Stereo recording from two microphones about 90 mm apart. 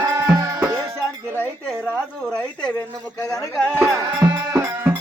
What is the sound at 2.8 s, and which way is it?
Speech, 40° left (ahead or behind).